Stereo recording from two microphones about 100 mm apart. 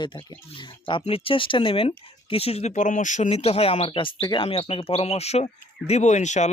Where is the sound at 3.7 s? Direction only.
60° left (ahead or behind).